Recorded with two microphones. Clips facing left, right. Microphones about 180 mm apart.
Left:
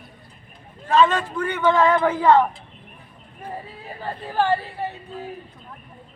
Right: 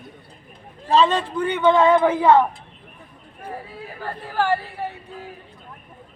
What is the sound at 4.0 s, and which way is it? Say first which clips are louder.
Speech: left 1 dB; 20° left (ahead or behind).